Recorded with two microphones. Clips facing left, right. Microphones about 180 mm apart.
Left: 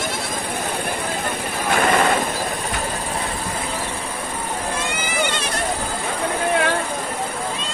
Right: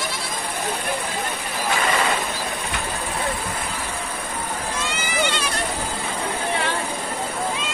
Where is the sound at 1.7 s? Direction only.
55° left (ahead or behind).